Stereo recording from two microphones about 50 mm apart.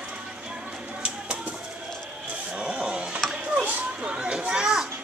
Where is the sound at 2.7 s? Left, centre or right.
Right.